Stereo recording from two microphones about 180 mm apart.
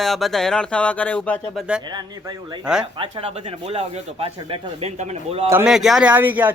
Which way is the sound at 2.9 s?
30° right (ahead or behind).